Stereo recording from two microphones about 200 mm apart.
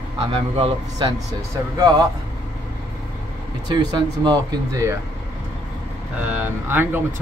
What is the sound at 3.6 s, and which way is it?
Speech, 20° right (ahead or behind).